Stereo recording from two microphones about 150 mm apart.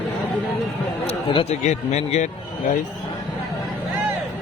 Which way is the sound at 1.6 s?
45° left (ahead or behind).